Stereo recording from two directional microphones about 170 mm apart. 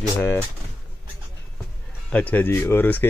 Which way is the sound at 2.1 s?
10° left (ahead or behind).